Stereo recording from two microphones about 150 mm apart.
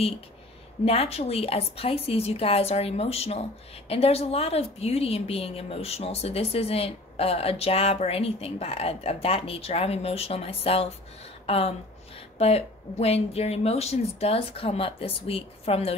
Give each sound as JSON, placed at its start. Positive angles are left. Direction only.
{"t": 0.8, "sound": "a woman's voice", "side_deg": 40}